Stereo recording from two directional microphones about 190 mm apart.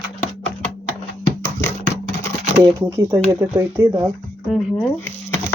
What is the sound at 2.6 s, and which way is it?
Speech, 15° right (ahead or behind).